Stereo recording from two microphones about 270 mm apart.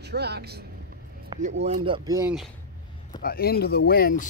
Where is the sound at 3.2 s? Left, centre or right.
Left.